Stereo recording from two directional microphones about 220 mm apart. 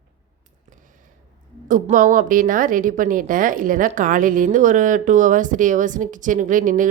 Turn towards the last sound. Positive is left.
turn(degrees=-35)  # may be behind; listen again after turning